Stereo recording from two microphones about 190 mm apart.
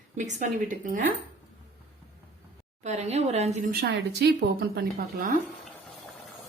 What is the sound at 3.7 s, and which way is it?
A woman's voice, 55° right (ahead or behind).